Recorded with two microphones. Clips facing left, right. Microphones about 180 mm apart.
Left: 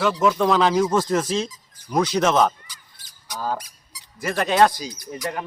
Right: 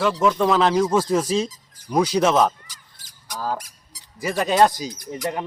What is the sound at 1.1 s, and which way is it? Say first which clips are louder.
Speech: right 2 dB; 10° right (ahead or behind).